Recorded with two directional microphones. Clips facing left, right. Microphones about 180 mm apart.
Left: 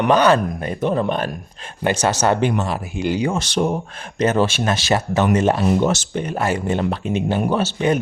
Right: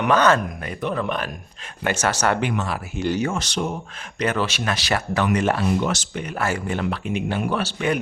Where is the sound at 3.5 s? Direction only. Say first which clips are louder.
Left 6 dB; 55° left (ahead or behind).